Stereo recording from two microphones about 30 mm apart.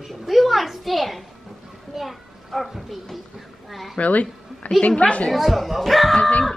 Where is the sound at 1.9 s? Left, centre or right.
Centre.